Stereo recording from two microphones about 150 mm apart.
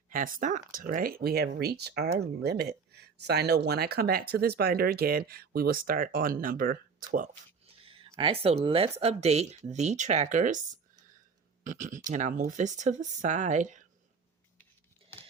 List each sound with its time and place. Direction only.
0.1 s speech: 65° right (ahead or behind)
7.6 s a sound: 40° right (ahead or behind)
8.2 s speech: 40° right (ahead or behind); by 10.6 s 55° right (ahead or behind)
11.6 s speech: 55° right (ahead or behind)